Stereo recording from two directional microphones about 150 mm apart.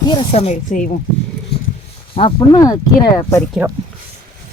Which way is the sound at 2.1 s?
35° left (ahead or behind).